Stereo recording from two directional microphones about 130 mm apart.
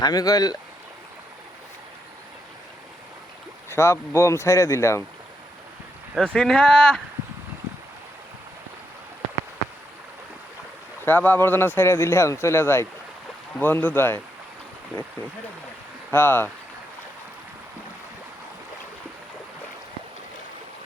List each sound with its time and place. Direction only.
0.0 s speech: 30° left (ahead or behind)
3.7 s speech: 20° left (ahead or behind)
6.1 s speech: 5° left (ahead or behind)
11.0 s speech: 15° left (ahead or behind)
16.1 s speech: 15° left (ahead or behind)